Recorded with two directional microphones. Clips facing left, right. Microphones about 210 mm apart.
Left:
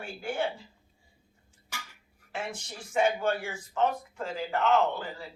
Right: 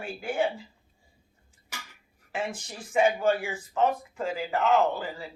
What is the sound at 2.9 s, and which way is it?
A man's voice, 5° right (ahead or behind).